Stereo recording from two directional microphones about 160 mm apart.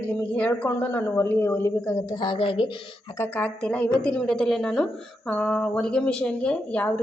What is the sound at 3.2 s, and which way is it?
Speech, 10° left (ahead or behind).